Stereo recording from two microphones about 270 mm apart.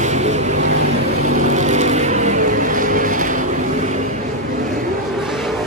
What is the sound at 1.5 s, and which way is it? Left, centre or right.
Vehicle, right.